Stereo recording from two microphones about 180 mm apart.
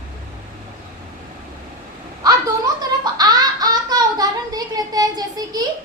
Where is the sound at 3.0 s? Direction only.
20° right (ahead or behind).